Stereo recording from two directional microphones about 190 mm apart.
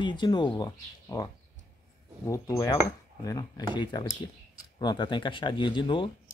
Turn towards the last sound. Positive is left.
turn(degrees=25)  # may be behind; listen again after turning